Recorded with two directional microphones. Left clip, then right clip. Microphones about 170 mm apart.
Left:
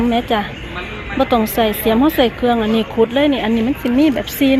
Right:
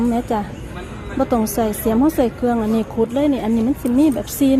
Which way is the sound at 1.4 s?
20° right (ahead or behind).